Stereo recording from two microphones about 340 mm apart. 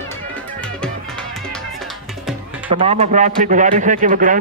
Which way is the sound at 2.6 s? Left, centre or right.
Centre.